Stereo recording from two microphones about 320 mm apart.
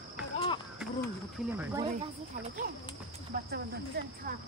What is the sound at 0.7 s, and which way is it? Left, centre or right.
Speech, centre.